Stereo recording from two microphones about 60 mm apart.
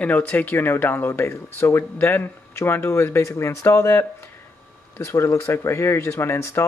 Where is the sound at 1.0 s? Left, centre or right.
Left.